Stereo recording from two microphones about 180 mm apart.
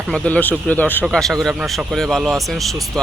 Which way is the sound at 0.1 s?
10° left (ahead or behind).